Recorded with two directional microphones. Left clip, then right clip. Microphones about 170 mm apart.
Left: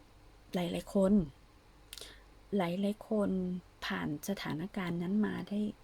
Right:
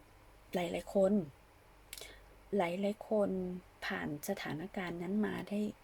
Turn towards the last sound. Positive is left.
turn(degrees=10)  # may be behind; listen again after turning